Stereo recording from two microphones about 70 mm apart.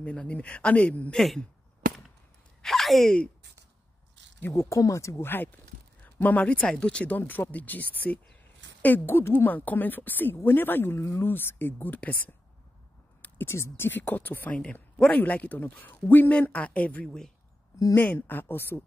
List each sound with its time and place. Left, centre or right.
0.0 s a man's voice: centre
1.1 s speech: centre
2.6 s speech: centre
4.4 s speech: left
6.0 s a man's voice: left
7.2 s a woman's voice: left
13.5 s a woman's voice: left
14.6 s a woman's voice: centre
17.0 s a man's voice: centre
18.0 s a woman's voice: left